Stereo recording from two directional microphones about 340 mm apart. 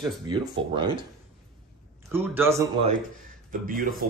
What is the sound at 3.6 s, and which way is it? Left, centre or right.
Speech, right.